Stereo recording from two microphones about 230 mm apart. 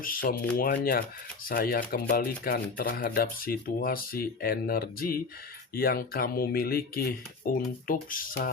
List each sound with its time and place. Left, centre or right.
0.0 s speech: left